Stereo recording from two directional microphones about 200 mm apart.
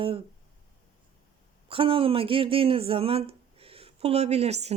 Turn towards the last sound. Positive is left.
turn(degrees=-30)  # may be behind; listen again after turning